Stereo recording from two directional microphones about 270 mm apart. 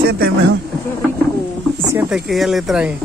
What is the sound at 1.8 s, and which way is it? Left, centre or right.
Speech, centre.